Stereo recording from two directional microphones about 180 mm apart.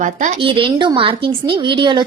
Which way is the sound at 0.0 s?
45° right (ahead or behind).